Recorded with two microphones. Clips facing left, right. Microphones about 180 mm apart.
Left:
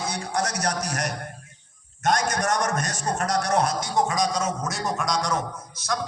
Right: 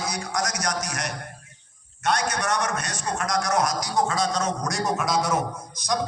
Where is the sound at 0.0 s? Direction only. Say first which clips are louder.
Left 1 dB; 30° left (ahead or behind).